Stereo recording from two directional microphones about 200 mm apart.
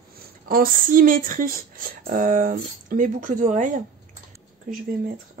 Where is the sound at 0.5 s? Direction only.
45° right (ahead or behind).